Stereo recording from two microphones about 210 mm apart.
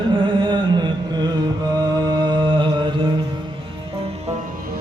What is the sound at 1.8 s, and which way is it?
Mantra, 20° right (ahead or behind).